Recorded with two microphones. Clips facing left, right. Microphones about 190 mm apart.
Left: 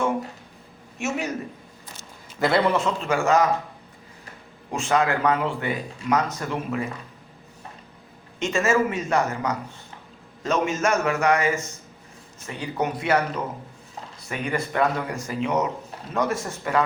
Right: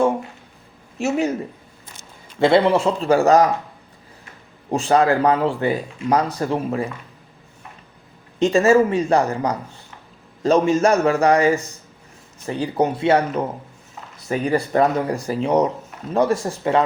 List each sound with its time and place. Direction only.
0.9 s speech: 30° right (ahead or behind)
2.4 s speech: 30° right (ahead or behind)
4.7 s speech: 35° right (ahead or behind)
8.4 s speech: 35° right (ahead or behind)